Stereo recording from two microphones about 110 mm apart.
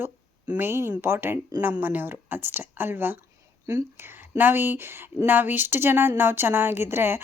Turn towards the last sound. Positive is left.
turn(degrees=-20)  # may be behind; listen again after turning